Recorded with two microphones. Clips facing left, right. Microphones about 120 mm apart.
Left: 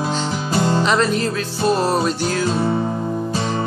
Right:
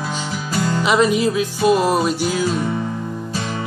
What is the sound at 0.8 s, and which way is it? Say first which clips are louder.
Music: right 2 dB; 10° right (ahead or behind).